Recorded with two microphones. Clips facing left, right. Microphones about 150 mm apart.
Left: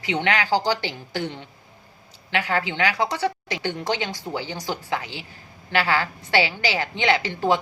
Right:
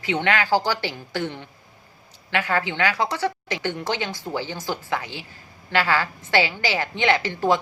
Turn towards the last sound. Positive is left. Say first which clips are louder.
# even
turn(degrees=15)  # may be behind; listen again after turning